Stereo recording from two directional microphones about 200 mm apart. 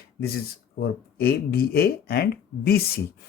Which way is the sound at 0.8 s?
50° left (ahead or behind).